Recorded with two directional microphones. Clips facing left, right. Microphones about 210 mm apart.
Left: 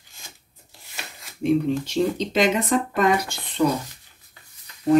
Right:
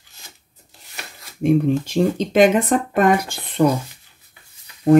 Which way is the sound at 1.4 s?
50° right (ahead or behind).